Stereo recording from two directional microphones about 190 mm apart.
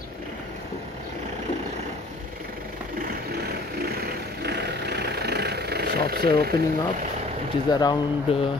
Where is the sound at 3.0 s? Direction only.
50° right (ahead or behind).